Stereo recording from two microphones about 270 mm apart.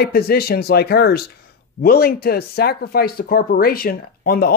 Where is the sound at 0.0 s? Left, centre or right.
Left.